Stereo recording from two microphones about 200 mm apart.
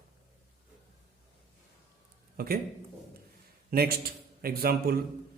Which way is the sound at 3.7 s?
50° right (ahead or behind).